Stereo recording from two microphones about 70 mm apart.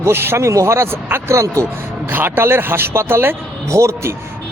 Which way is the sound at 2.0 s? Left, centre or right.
Right.